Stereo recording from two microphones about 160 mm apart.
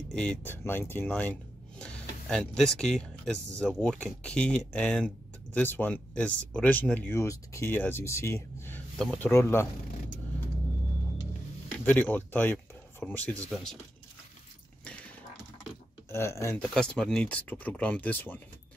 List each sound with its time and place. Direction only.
0.1 s speech: 5° left (ahead or behind)
11.8 s speech: 10° left (ahead or behind)
16.1 s speech: 15° left (ahead or behind)
16.6 s speech: 5° left (ahead or behind)